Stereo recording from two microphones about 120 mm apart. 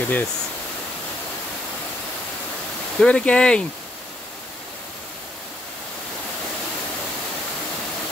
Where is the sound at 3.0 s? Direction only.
10° left (ahead or behind).